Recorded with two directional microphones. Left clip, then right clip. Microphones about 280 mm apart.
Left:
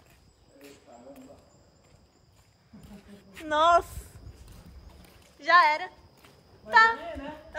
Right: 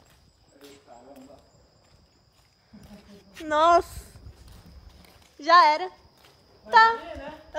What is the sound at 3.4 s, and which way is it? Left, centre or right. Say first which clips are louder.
Speech: right 2 dB; right.